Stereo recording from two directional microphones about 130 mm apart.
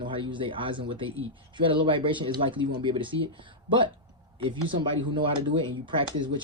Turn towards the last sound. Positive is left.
turn(degrees=-40)  # may be behind; listen again after turning